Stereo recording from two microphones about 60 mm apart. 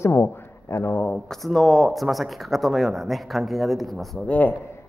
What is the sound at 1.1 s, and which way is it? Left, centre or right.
Speech, centre.